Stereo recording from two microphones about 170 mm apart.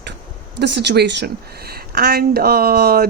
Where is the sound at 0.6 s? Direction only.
85° right.